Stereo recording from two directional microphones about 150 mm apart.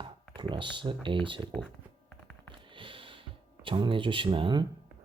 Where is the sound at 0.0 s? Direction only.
35° right (ahead or behind).